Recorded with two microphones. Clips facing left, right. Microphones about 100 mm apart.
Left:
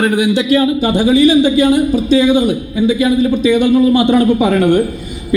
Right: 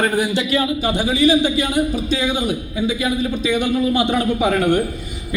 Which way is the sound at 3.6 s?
50° left (ahead or behind).